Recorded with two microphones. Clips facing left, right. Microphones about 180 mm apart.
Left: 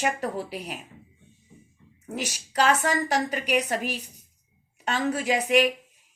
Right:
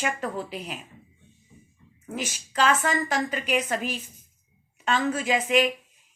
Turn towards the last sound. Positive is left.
turn(degrees=40)  # may be behind; listen again after turning